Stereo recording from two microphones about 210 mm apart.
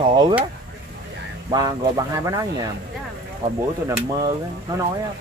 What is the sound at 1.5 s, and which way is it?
Speech, 15° right (ahead or behind).